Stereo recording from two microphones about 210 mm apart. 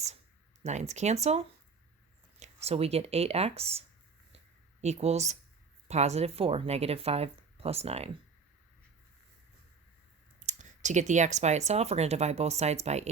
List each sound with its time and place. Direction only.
0.6 s speech: 35° right (ahead or behind)
10.4 s speech: 35° right (ahead or behind)